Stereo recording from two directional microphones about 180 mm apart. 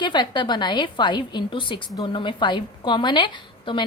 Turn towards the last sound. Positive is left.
turn(degrees=25)  # may be behind; listen again after turning